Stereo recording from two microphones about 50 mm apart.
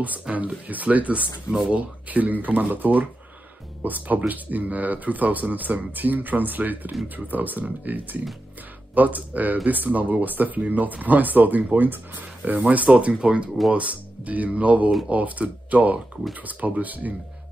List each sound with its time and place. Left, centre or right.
0.0 s speech: right